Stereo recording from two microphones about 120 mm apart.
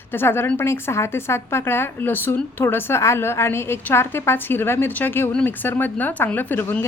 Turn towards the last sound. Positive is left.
turn(degrees=15)  # may be behind; listen again after turning